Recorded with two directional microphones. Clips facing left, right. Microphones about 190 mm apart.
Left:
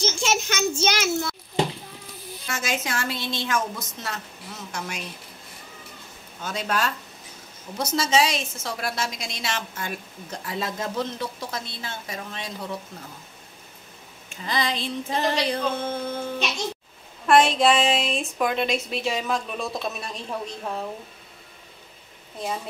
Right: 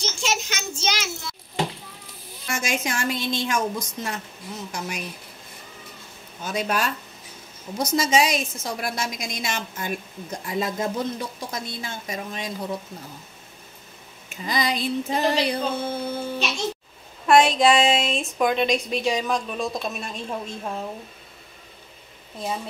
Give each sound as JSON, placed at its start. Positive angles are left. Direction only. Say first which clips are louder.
{"t": 0.0, "sound": "a sound", "louder": "left 3 dB", "side_deg": 50}
{"t": 2.5, "sound": "a woman's voice", "louder": "right 2 dB", "side_deg": -15}
{"t": 6.4, "sound": "a woman's voice", "louder": "right 1 dB", "side_deg": -10}
{"t": 14.3, "sound": "female singing", "louder": "right 2 dB", "side_deg": -10}
{"t": 17.3, "sound": "a woman's voice", "louder": "right 1 dB", "side_deg": 0}